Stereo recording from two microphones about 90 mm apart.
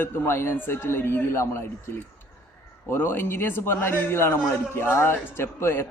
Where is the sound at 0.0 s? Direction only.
25° left (ahead or behind).